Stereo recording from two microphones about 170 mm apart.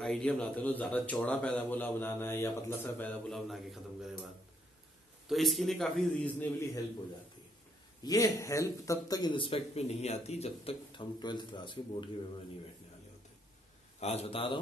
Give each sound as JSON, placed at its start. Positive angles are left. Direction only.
{"t": 0.0, "sound": "a man's voice", "side_deg": 5}
{"t": 5.3, "sound": "a man's voice", "side_deg": 0}
{"t": 8.0, "sound": "speech", "side_deg": 20}
{"t": 13.9, "sound": "a man's voice", "side_deg": 35}